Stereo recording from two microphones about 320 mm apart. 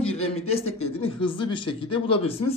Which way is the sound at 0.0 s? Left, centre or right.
Centre.